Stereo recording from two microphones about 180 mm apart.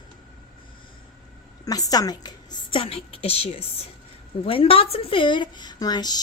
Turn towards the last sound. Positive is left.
turn(degrees=20)  # may be behind; listen again after turning